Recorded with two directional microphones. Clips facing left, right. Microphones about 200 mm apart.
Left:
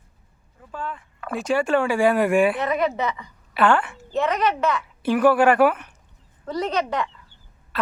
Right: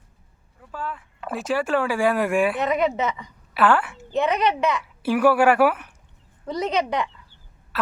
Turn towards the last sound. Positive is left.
turn(degrees=-5)  # may be behind; listen again after turning